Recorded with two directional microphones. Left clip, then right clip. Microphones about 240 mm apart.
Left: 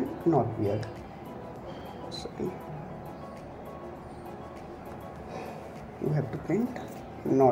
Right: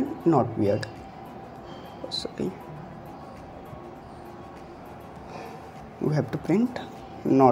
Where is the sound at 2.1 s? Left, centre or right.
Right.